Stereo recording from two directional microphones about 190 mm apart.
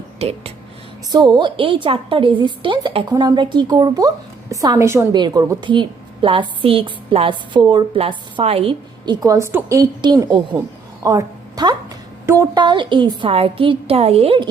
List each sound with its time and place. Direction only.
0.2 s a woman's voice: 30° right (ahead or behind)
9.2 s a woman's voice: 15° right (ahead or behind)